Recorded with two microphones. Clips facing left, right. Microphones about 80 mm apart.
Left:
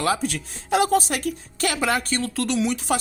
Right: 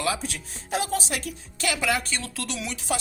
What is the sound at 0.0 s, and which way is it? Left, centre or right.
Speech, left.